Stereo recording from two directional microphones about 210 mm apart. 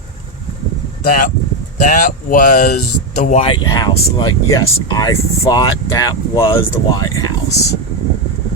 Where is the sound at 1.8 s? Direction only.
40° left (ahead or behind).